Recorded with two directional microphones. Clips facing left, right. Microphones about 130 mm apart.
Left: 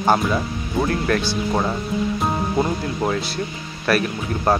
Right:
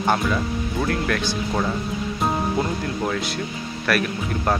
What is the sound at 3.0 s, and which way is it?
Speech, 30° left (ahead or behind).